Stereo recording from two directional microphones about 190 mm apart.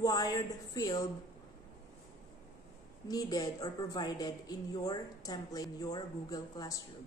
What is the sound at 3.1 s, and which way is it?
A woman's voice, 20° left (ahead or behind).